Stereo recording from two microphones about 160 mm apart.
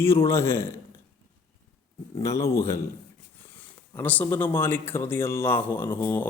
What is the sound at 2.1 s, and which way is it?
Speech, 20° left (ahead or behind).